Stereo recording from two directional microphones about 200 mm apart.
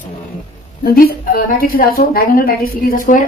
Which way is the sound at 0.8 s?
50° left (ahead or behind).